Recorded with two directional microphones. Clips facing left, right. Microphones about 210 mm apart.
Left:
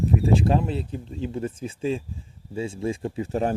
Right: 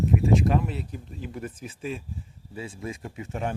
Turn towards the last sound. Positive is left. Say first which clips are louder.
# left 7 dB
turn(degrees=35)  # may be behind; listen again after turning